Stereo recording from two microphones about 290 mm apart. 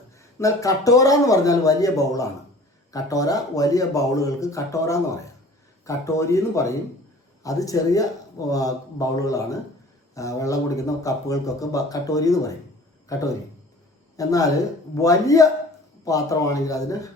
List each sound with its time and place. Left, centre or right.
0.2 s speech: centre